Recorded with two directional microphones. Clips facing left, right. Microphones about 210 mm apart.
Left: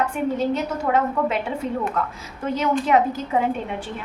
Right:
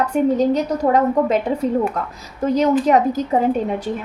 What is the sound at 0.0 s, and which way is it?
A woman's voice, 40° right (ahead or behind).